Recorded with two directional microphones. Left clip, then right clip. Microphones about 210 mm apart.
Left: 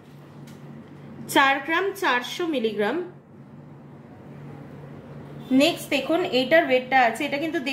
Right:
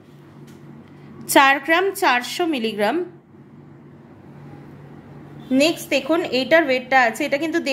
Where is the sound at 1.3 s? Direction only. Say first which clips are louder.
Right 5 dB; 50° right (ahead or behind).